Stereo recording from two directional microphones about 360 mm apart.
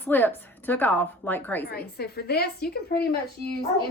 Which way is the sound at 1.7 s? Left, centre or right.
Left.